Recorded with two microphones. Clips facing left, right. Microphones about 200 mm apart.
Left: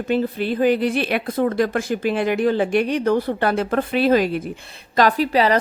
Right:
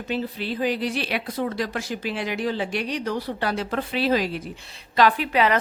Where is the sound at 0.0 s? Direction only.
55° left (ahead or behind).